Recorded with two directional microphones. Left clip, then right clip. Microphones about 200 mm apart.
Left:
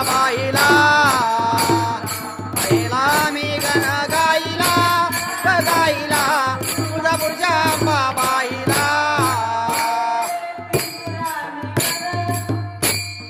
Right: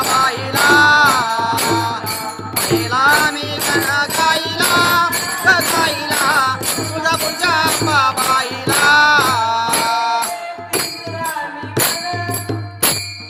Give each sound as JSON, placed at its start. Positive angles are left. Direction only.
{"t": 0.2, "sound": "music", "side_deg": 25}